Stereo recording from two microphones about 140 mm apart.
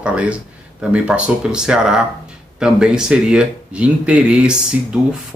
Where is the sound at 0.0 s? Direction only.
10° right (ahead or behind).